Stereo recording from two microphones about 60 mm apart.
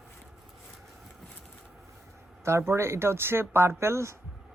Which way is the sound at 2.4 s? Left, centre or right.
Right.